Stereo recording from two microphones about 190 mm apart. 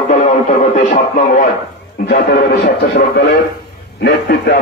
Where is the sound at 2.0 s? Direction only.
60° left (ahead or behind).